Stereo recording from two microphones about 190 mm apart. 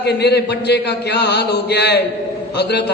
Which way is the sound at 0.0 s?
60° left (ahead or behind).